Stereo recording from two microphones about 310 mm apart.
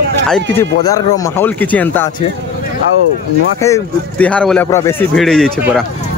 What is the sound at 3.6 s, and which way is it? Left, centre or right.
A man's voice, centre.